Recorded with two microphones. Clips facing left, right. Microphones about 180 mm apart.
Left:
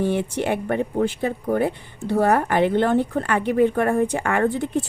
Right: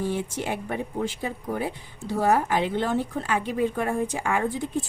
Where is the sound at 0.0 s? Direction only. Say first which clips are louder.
Left 6 dB; 65° left (ahead or behind).